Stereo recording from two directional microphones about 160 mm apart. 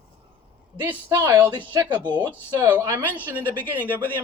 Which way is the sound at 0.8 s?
15° right (ahead or behind).